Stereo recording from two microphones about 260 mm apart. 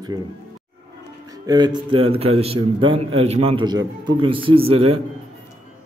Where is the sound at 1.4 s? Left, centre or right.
Centre.